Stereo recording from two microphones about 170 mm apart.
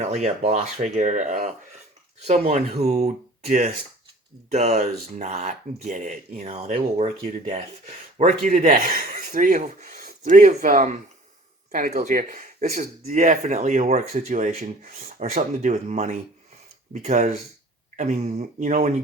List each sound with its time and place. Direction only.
0.0 s speech: 40° right (ahead or behind)
2.8 s speech: 40° right (ahead or behind)